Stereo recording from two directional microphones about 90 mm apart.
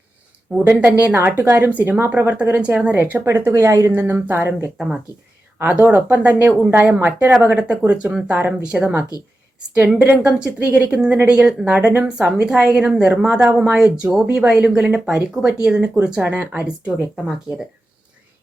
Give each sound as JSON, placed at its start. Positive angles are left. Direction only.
{"t": 0.5, "sound": "a woman's voice", "side_deg": -20}
{"t": 10.0, "sound": "a woman's voice", "side_deg": -15}
{"t": 13.2, "sound": "a woman's voice", "side_deg": -15}